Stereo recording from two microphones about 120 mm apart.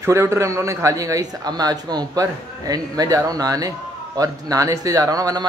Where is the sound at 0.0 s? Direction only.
25° right (ahead or behind).